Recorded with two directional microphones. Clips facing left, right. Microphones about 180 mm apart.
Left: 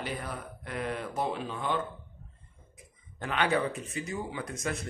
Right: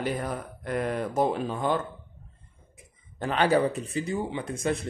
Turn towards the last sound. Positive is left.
turn(degrees=-30)  # may be behind; listen again after turning